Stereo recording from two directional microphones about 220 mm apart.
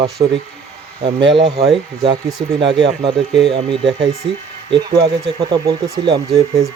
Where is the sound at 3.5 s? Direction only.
25° right (ahead or behind).